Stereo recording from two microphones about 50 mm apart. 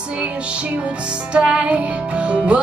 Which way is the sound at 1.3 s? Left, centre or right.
Centre.